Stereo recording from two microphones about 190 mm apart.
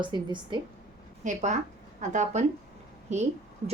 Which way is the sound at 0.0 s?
25° right (ahead or behind).